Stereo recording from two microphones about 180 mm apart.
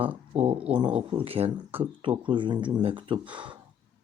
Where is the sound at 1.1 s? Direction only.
30° right (ahead or behind).